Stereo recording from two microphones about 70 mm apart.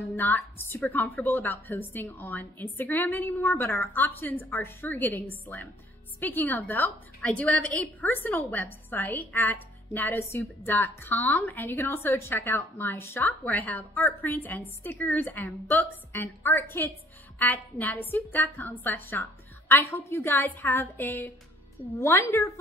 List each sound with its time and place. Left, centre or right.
0.1 s a woman's voice: left
21.9 s a woman's voice: left